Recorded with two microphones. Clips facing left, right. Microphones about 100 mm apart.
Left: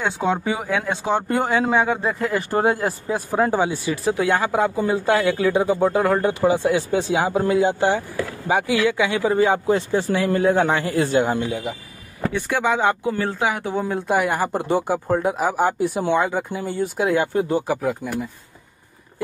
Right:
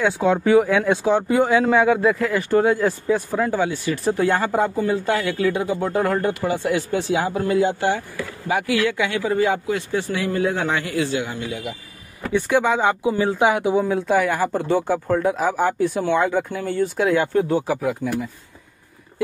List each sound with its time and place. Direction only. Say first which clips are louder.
0.2 s speech: right 9 dB; 15° left (ahead or behind)
1.0 s speech: right 3 dB; centre (ahead or behind)
2.0 s speech: right 5 dB; 25° left (ahead or behind)
2.5 s speech: right 3 dB; 45° left (ahead or behind)
3.5 s speech: left 1 dB; 20° left (ahead or behind)
3.9 s speech: right 1 dB; 5° left (ahead or behind)
4.7 s speech: left 2 dB; 15° left (ahead or behind); by 11.4 s 45° left (ahead or behind)
12.3 s speech: right 3 dB; 5° right (ahead or behind)
13.8 s speech: right 3 dB; 5° left (ahead or behind)
14.1 s speech: even; 15° left (ahead or behind)